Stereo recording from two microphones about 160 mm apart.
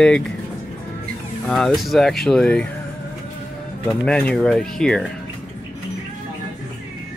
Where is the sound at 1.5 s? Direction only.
Centre (ahead or behind).